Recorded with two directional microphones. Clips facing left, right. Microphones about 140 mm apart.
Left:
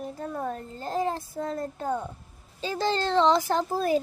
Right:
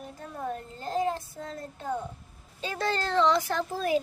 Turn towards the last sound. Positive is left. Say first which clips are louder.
# left 3 dB
turn(degrees=35)  # may be behind; listen again after turning